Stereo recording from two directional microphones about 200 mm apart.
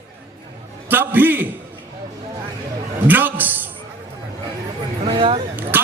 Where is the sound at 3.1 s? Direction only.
10° right (ahead or behind).